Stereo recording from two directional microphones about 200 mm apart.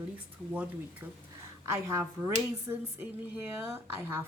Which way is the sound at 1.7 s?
15° right (ahead or behind).